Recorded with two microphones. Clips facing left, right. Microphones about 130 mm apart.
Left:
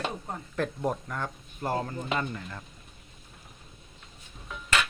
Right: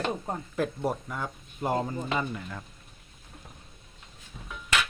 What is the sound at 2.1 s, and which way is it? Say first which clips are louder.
Speech: left 2 dB; 5° right (ahead or behind).